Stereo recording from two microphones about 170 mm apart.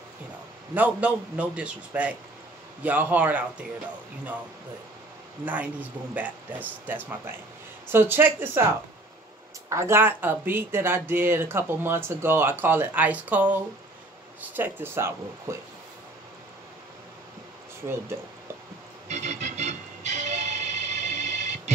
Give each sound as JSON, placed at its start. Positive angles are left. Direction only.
{"t": 0.7, "sound": "speech", "side_deg": -10}
{"t": 5.4, "sound": "speech", "side_deg": -10}
{"t": 19.0, "sound": "music", "side_deg": -40}